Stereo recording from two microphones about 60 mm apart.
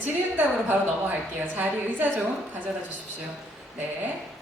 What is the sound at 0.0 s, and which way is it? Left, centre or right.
A woman's voice, right.